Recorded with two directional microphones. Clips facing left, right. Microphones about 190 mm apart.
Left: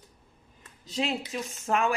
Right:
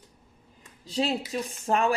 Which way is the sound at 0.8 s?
35° right (ahead or behind).